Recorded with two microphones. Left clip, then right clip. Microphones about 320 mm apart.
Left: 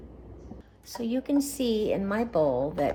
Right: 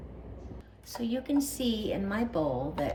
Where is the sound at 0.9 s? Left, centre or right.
Left.